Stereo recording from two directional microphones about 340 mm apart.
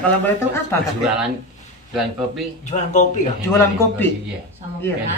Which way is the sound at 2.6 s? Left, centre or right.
Left.